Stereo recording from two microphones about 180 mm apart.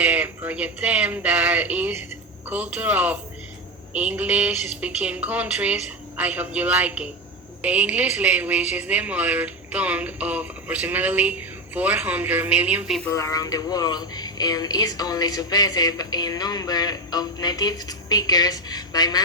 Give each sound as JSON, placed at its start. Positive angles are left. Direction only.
{"t": 0.0, "sound": "a woman's voice", "side_deg": -10}
{"t": 13.1, "sound": "speech", "side_deg": 15}